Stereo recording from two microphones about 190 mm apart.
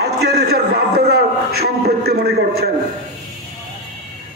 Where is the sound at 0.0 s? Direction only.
55° right (ahead or behind).